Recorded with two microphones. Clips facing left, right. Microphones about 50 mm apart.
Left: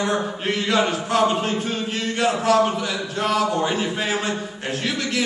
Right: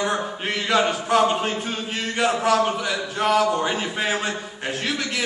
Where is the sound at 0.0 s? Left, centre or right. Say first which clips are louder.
Left 2 dB; centre.